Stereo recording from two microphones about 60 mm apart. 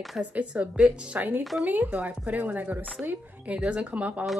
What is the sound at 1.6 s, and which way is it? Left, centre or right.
A woman's voice, right.